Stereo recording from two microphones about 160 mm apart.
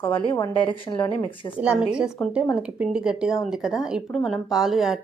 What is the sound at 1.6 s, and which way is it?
A woman's voice, 5° right (ahead or behind).